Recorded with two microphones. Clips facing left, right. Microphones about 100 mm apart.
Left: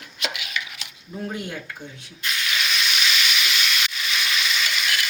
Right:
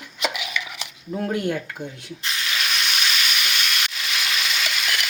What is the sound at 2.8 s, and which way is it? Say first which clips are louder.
Frying: even; 40° right (ahead or behind).